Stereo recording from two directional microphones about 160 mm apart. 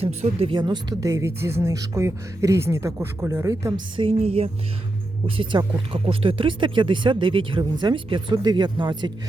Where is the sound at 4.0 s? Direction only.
40° right (ahead or behind).